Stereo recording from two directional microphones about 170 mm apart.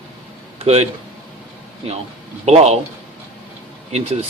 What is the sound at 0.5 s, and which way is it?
Speech, 40° right (ahead or behind).